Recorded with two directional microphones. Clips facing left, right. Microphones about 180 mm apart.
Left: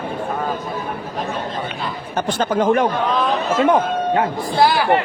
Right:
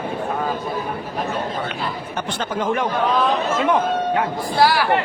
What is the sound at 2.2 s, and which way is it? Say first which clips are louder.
Speech: left 7 dB; 45° left (ahead or behind).